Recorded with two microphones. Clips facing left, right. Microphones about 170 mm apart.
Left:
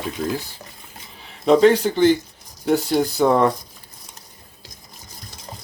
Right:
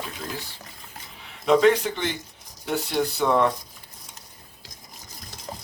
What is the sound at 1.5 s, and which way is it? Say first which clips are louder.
Speech: left 4 dB; 35° left (ahead or behind).